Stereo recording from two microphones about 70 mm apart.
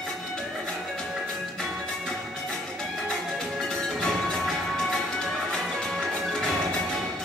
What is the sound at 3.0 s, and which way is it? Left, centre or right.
Music, centre.